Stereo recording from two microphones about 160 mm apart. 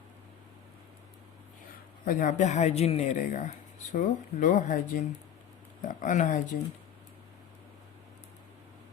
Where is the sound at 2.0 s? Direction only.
55° left (ahead or behind).